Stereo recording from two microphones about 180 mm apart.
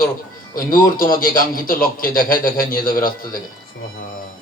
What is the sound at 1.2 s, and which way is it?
A man's voice, 50° left (ahead or behind).